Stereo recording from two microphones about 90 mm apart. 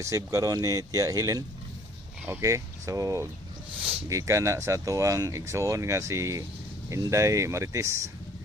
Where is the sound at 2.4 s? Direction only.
40° right (ahead or behind).